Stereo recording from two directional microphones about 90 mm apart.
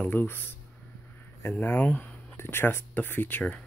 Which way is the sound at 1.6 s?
25° left (ahead or behind).